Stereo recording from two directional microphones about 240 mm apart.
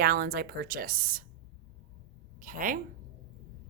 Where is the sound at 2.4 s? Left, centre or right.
Right.